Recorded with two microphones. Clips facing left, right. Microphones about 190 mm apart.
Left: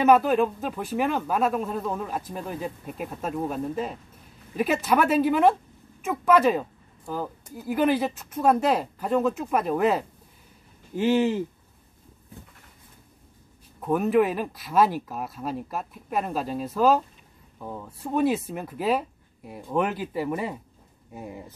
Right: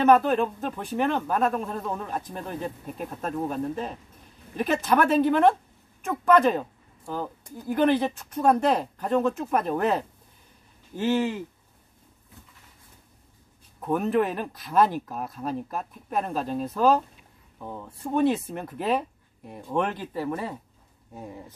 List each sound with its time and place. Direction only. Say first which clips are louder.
0.0 s speech: left 1 dB; 5° left (ahead or behind)
11.0 s speech: left 3 dB; 15° left (ahead or behind)
13.7 s speech: left 2 dB; centre (ahead or behind)